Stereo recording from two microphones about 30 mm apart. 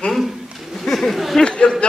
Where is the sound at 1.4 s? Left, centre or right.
Left.